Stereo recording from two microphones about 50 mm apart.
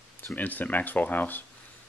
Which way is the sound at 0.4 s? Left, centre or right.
Left.